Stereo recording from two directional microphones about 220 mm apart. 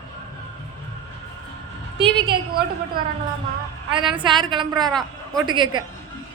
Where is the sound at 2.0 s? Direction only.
25° right (ahead or behind).